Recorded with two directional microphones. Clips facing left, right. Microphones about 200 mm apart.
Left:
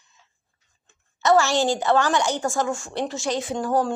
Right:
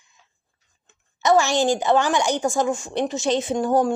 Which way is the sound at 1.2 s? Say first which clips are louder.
Right 1 dB; 15° right (ahead or behind).